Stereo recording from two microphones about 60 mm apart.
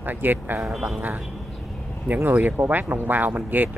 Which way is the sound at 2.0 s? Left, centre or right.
Right.